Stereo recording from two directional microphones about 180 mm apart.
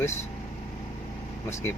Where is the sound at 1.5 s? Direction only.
15° left (ahead or behind).